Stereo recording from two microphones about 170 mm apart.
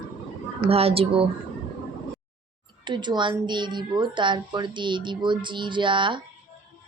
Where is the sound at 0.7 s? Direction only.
35° right (ahead or behind).